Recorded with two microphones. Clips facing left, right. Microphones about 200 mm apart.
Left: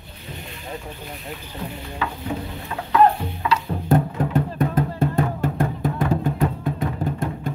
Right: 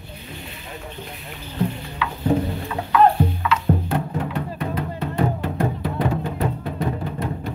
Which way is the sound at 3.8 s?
45° left (ahead or behind).